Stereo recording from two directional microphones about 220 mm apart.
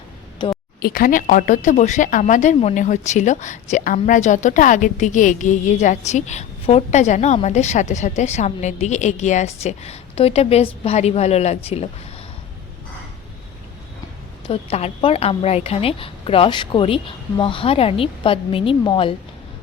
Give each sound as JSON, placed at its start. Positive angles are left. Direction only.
{"t": 0.3, "sound": "a sound", "side_deg": 20}
{"t": 0.8, "sound": "a woman's voice", "side_deg": 40}
{"t": 14.4, "sound": "a woman's voice", "side_deg": 25}